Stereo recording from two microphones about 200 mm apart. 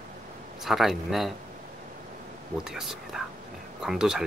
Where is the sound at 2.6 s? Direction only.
Centre (ahead or behind).